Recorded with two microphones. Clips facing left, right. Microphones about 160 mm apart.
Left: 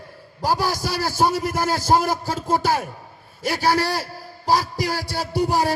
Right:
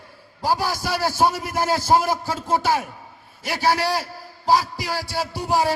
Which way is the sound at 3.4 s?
40° left (ahead or behind).